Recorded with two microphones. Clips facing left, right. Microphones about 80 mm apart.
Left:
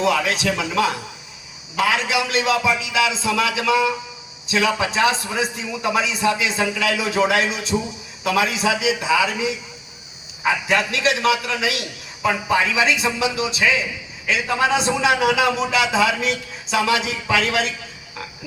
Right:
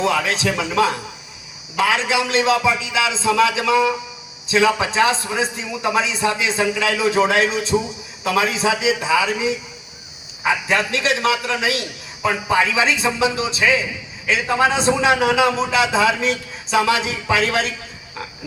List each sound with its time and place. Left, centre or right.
0.0 s a man's voice: right
10.7 s a man's voice: right